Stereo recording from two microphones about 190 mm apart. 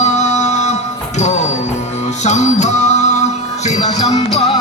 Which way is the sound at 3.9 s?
20° left (ahead or behind).